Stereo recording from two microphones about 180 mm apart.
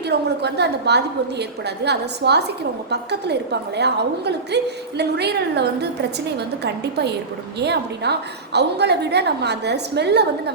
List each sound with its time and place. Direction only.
0.0 s a woman's voice: 65° right (ahead or behind)